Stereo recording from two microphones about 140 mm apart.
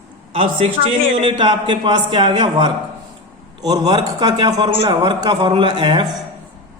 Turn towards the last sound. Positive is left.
turn(degrees=-30)  # may be behind; listen again after turning